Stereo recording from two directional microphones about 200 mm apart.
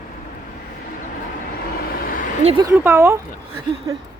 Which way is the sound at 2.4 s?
30° right (ahead or behind).